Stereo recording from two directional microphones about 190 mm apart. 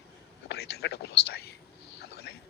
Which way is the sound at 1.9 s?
60° left (ahead or behind).